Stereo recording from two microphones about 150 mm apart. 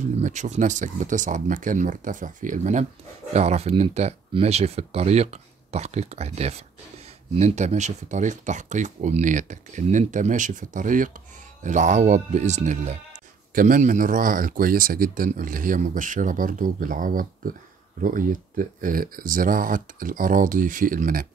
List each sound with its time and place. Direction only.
0.2 s speech: 55° right (ahead or behind)